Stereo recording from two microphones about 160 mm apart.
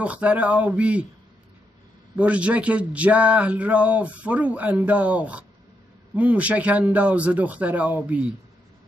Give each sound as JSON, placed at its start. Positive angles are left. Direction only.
{"t": 0.0, "sound": "a man's voice", "side_deg": -10}
{"t": 2.1, "sound": "a man's voice", "side_deg": -10}